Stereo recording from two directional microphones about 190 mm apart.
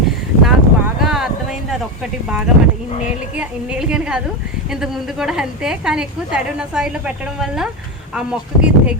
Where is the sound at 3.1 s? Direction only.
5° right (ahead or behind).